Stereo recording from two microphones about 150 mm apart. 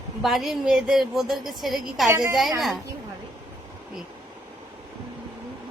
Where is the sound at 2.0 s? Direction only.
20° right (ahead or behind).